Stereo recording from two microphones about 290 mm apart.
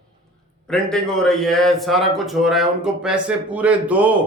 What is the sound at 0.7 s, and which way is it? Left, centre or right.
A man's voice, centre.